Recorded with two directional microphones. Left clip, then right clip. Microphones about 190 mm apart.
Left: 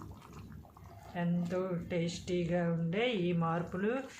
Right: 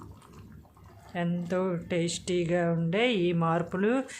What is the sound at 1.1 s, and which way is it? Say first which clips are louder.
Speech: right 6 dB; 60° right (ahead or behind).